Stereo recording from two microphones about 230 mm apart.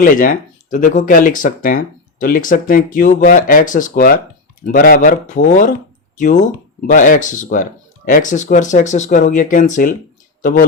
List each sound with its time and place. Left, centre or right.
0.0 s speech: left